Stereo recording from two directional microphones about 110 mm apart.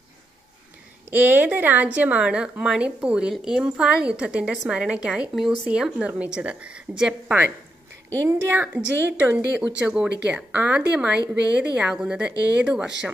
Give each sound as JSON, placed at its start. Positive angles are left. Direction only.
{"t": 1.1, "sound": "a woman's voice", "side_deg": -15}
{"t": 8.2, "sound": "a woman's voice", "side_deg": -25}